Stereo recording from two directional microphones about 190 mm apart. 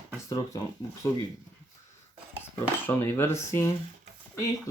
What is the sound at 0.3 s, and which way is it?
Speech, 15° left (ahead or behind).